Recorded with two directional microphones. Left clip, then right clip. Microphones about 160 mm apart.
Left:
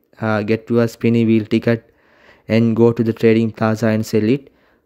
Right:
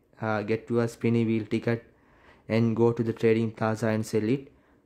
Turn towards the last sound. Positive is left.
turn(degrees=35)  # may be behind; listen again after turning